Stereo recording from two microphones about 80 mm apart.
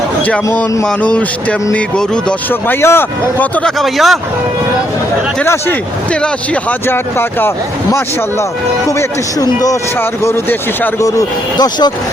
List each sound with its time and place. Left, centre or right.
0.9 s speech: centre
2.5 s speech: left
3.6 s speech: centre
6.2 s speech: centre
6.8 s speech: left
8.9 s speech: left
10.0 s speech: left
11.5 s speech: left